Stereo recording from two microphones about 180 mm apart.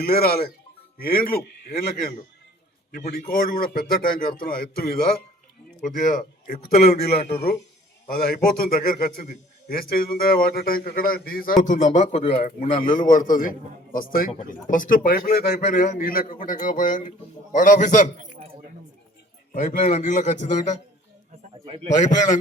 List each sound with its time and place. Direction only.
0.0 s a man's voice: 55° left (ahead or behind)
3.2 s a man's voice: 55° left (ahead or behind)
5.8 s a man's voice: 45° left (ahead or behind)
7.2 s speech: 35° left (ahead or behind)
8.0 s a man's voice: 55° left (ahead or behind); by 12.3 s 40° left (ahead or behind)
12.5 s a man's voice: 50° left (ahead or behind)
19.5 s a man's voice: 40° left (ahead or behind)
22.0 s a man's voice: 45° left (ahead or behind)